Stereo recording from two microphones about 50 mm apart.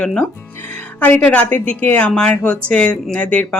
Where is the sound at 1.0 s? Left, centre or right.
Left.